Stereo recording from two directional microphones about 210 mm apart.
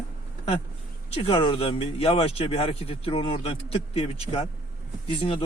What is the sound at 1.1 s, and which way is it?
Speech, 25° left (ahead or behind).